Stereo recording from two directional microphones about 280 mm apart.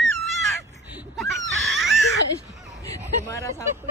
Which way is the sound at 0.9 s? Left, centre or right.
Centre.